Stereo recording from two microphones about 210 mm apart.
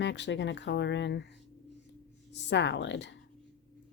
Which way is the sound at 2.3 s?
55° left (ahead or behind).